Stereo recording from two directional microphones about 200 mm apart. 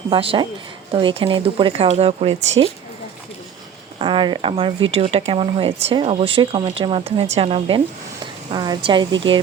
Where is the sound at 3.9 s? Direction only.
25° right (ahead or behind).